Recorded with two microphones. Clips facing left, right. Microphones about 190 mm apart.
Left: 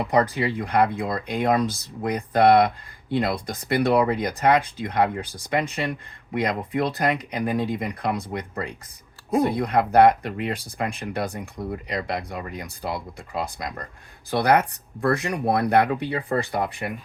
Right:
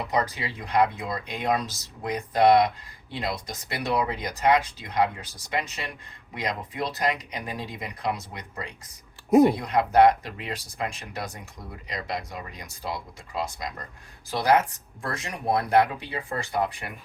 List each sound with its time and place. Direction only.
0.1 s speech: 55° left (ahead or behind)